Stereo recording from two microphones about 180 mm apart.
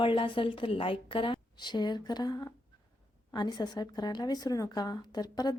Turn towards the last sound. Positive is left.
turn(degrees=20)  # may be behind; listen again after turning